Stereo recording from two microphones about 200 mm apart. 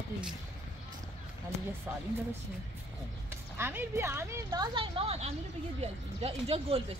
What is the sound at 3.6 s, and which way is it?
A woman's voice, 10° right (ahead or behind).